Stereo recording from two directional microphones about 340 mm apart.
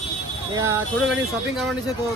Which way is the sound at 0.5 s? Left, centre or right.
Centre.